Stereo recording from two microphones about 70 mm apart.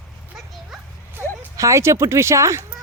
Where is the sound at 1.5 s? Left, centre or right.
Right.